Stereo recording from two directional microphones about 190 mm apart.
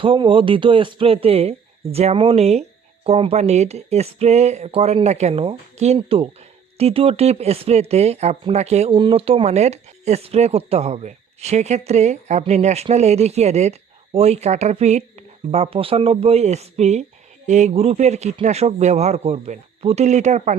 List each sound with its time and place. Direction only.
0.0 s speech: 25° right (ahead or behind)